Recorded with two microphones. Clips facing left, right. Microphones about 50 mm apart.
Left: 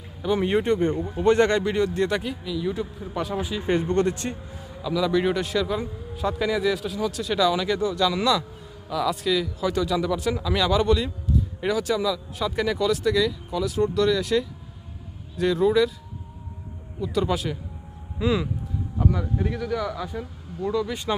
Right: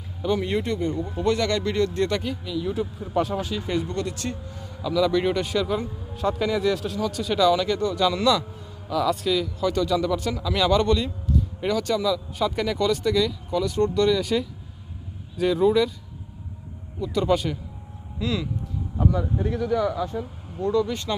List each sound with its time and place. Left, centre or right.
0.4 s speech: left
1.6 s speech: centre
2.4 s a man's voice: centre
3.3 s speech: centre
3.6 s a man's voice: left; by 15.9 s centre
17.0 s a man's voice: centre
18.2 s speech: left
19.3 s a man's voice: centre
20.6 s speech: centre